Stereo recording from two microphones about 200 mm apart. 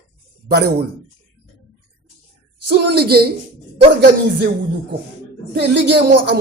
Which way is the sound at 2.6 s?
55° right (ahead or behind).